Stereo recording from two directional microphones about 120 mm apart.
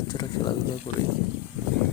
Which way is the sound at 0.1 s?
35° left (ahead or behind).